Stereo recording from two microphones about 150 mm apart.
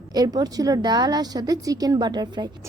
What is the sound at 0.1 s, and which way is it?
A woman's voice, 25° right (ahead or behind).